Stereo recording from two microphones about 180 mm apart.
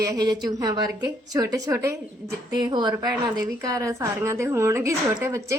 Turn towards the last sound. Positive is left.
turn(degrees=-15)  # may be behind; listen again after turning